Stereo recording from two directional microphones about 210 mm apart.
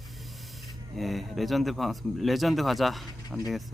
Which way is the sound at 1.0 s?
Centre (ahead or behind).